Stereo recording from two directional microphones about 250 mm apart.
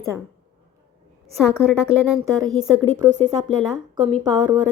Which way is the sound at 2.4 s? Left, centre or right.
Centre.